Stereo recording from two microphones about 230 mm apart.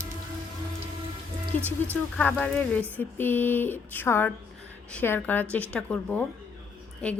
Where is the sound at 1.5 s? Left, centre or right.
Centre.